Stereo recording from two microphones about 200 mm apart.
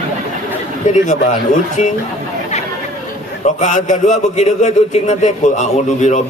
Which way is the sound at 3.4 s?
35° left (ahead or behind).